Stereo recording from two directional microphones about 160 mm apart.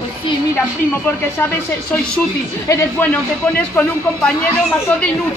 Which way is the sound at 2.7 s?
15° left (ahead or behind).